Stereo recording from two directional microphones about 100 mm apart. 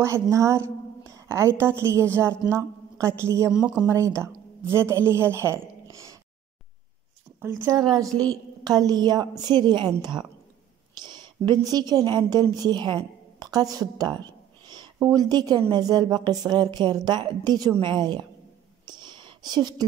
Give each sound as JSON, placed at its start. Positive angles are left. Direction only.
{"t": 0.0, "sound": "a woman's voice", "side_deg": -30}
{"t": 3.4, "sound": "speech", "side_deg": -10}
{"t": 3.9, "sound": "a woman's voice", "side_deg": -30}
{"t": 7.4, "sound": "speech", "side_deg": -20}
{"t": 7.7, "sound": "a woman's voice", "side_deg": -35}
{"t": 11.1, "sound": "a sound", "side_deg": -45}
{"t": 11.7, "sound": "a woman's voice", "side_deg": -40}
{"t": 18.9, "sound": "whispering", "side_deg": -50}